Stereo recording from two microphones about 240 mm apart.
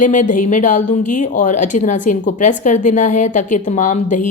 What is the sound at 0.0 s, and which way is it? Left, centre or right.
A woman's voice, left.